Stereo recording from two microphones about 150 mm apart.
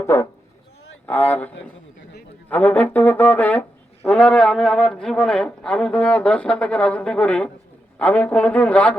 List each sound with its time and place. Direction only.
0.0 s a man's voice: 15° left (ahead or behind)